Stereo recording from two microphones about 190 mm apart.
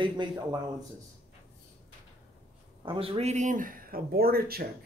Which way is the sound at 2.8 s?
30° right (ahead or behind).